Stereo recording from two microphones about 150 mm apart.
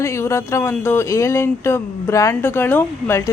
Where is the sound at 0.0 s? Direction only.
20° left (ahead or behind).